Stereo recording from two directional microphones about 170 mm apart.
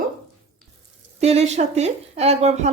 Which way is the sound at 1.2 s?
40° right (ahead or behind).